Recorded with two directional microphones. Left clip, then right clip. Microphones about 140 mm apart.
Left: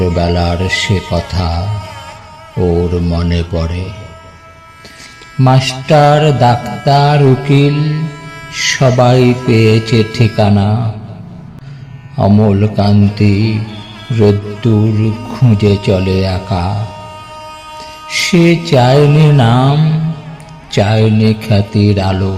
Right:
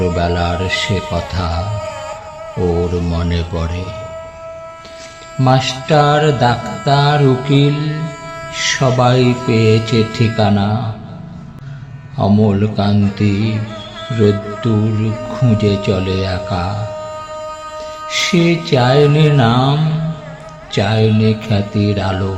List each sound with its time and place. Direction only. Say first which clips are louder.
0.0 s music: left 2 dB; 45° left (ahead or behind)
1.8 s music: right 4 dB; 25° left (ahead or behind)
2.9 s music: left 3 dB; 35° left (ahead or behind)
5.4 s music: left 1 dB; 45° left (ahead or behind)
6.6 s music: left 2 dB; 20° left (ahead or behind)
6.8 s music: left 3 dB; 50° left (ahead or behind)
12.1 s music: left 3 dB; 45° left (ahead or behind)
15.3 s music: left 2 dB; 50° left (ahead or behind)
16.9 s music: right 3 dB; 25° left (ahead or behind)
18.1 s music: left 4 dB; 50° left (ahead or behind)